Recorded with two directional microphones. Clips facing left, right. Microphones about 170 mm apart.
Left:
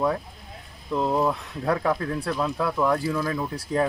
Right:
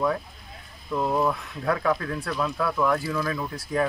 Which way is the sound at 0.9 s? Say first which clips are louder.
Left 1 dB; 15° left (ahead or behind).